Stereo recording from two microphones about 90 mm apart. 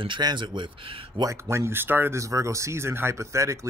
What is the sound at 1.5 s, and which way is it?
Speech, 30° right (ahead or behind).